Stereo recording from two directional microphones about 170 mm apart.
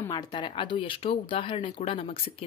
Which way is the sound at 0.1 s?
25° left (ahead or behind).